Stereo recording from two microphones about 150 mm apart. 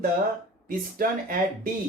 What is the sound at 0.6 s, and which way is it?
Speech, 75° right (ahead or behind).